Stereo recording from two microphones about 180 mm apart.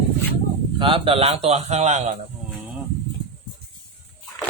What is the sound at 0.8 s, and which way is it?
A man's voice, 30° right (ahead or behind).